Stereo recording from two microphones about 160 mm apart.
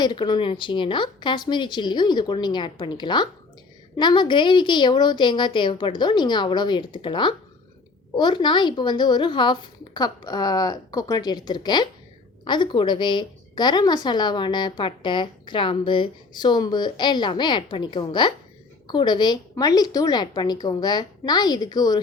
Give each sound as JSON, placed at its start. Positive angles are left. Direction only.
{"t": 0.0, "sound": "a woman's voice", "side_deg": 25}